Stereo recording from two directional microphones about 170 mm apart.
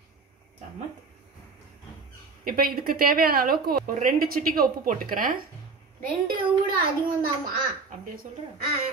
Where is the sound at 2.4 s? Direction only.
60° right (ahead or behind).